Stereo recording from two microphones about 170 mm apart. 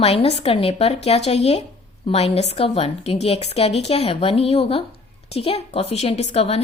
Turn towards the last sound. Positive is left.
turn(degrees=35)  # may be behind; listen again after turning